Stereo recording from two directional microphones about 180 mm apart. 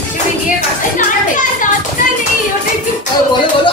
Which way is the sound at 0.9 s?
45° left (ahead or behind).